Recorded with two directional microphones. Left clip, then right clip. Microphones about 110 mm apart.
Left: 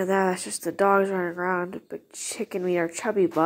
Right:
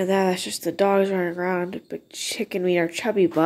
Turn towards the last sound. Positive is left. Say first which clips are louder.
# right 3 dB
turn(degrees=-5)  # may be behind; listen again after turning